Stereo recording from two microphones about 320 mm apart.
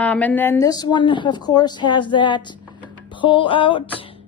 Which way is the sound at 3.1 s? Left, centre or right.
Centre.